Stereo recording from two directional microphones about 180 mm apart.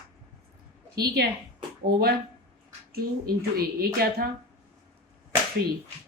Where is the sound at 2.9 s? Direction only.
55° right (ahead or behind).